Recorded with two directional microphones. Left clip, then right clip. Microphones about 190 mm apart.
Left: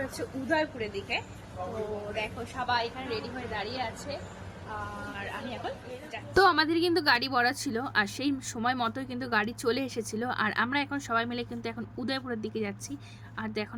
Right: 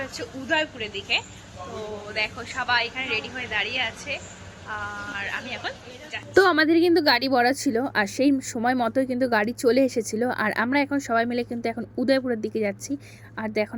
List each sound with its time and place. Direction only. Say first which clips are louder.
0.4 s speech: right 4 dB; centre (ahead or behind)
6.3 s a woman's voice: right 5 dB; 15° right (ahead or behind)